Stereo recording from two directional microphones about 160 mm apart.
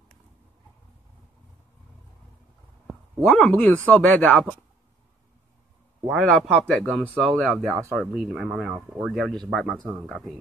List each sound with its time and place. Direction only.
3.3 s speech: 5° left (ahead or behind)
6.0 s speech: 5° left (ahead or behind)
7.7 s speech: 20° right (ahead or behind)
8.0 s speech: 5° right (ahead or behind)